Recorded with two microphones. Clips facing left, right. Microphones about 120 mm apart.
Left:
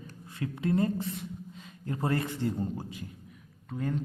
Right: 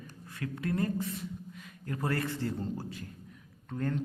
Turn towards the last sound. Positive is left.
turn(degrees=10)  # may be behind; listen again after turning